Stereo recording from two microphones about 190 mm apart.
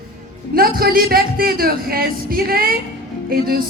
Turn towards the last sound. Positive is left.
turn(degrees=-50)  # may be behind; listen again after turning